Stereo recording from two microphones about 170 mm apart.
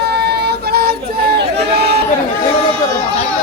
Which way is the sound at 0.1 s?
75° right (ahead or behind).